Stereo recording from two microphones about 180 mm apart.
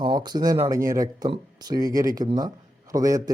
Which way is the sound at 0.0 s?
25° right (ahead or behind).